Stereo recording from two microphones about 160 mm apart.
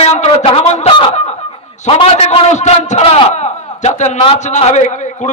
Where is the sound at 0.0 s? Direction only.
40° left (ahead or behind).